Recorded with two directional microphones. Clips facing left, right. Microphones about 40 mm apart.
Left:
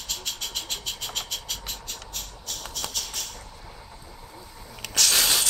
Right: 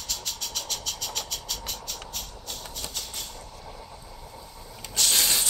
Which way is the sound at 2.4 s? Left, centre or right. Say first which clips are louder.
Left 3 dB; left.